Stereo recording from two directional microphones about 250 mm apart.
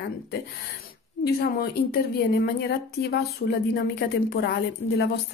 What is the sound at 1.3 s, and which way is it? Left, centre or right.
A woman's voice, left.